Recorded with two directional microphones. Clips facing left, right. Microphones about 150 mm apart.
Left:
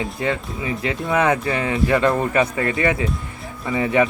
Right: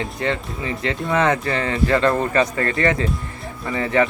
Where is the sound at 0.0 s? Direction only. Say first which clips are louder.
Even; 10° left (ahead or behind).